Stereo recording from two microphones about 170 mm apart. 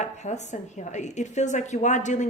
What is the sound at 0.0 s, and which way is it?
A woman's voice, 45° left (ahead or behind).